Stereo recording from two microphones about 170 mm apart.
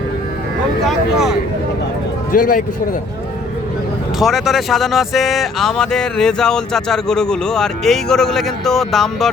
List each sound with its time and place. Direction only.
0.9 s vehicle: centre (ahead or behind)
2.3 s speech: 55° left (ahead or behind)
4.2 s speech: centre (ahead or behind)